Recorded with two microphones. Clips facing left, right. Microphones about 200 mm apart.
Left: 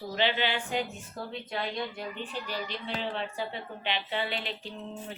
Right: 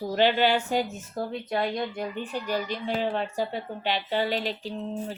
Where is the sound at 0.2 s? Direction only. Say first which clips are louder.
Right 7 dB; 45° right (ahead or behind).